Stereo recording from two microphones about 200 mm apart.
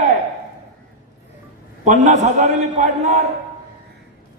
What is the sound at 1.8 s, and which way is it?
A man's voice, 35° right (ahead or behind).